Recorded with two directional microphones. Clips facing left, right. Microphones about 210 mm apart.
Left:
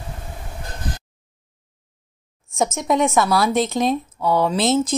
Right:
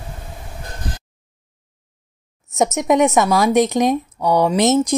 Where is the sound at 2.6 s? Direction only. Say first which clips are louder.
Right 4 dB; 15° right (ahead or behind).